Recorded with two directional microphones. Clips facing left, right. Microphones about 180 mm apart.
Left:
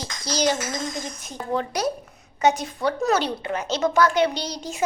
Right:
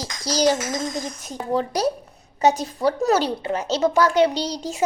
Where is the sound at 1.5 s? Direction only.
35° right (ahead or behind).